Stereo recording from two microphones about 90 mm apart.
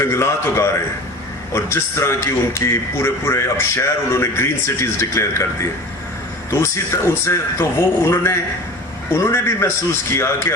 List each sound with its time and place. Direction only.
0.0 s a man's voice: 30° left (ahead or behind)
6.5 s a man's voice: 30° left (ahead or behind)